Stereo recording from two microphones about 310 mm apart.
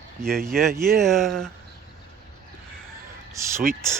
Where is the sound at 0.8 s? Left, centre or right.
Centre.